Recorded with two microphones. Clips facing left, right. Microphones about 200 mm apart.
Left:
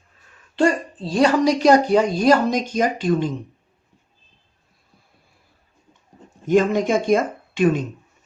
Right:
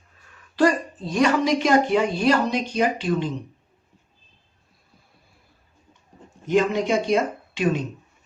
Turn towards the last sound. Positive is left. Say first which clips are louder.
# left 5 dB
turn(degrees=50)  # may be behind; listen again after turning